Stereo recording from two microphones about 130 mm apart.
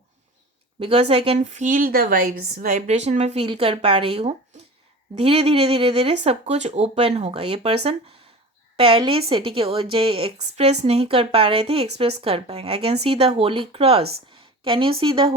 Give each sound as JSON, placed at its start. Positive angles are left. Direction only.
{"t": 0.8, "sound": "a woman's voice", "side_deg": -45}
{"t": 1.5, "sound": "a woman's voice", "side_deg": -70}